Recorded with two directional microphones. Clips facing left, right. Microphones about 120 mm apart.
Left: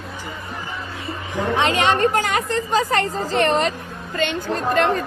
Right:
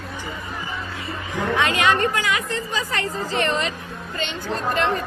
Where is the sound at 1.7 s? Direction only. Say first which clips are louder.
Left 2 dB; 30° left (ahead or behind).